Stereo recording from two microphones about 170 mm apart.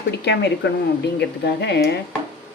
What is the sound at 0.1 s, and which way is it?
Speech, 80° left.